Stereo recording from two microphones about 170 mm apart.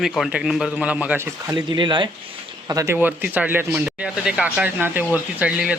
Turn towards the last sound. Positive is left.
turn(degrees=-5)  # may be behind; listen again after turning